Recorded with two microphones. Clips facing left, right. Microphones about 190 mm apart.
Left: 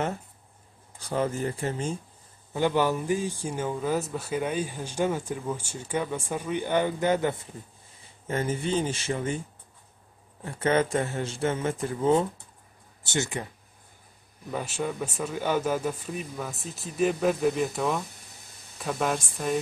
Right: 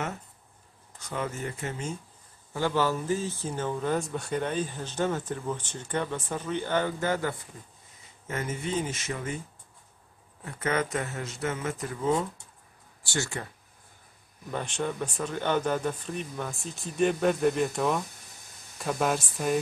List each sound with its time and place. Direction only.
0.9 s speech: 35° left (ahead or behind)
2.5 s speech: 15° left (ahead or behind)
8.3 s speech: 30° left (ahead or behind)
10.4 s a man's voice: 30° left (ahead or behind)
13.0 s a man's voice: 20° left (ahead or behind)
14.5 s speech: 5° left (ahead or behind)